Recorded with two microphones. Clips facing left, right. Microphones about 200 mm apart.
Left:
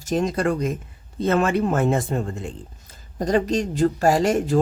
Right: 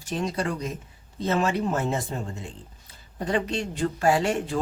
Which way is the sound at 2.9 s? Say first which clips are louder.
Left 6 dB; 40° left (ahead or behind).